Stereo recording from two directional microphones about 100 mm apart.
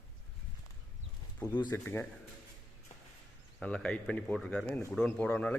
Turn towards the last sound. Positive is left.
turn(degrees=15)  # may be behind; listen again after turning